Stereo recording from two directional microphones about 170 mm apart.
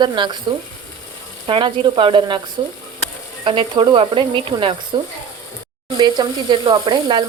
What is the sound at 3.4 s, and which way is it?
Sizzle, 30° right (ahead or behind).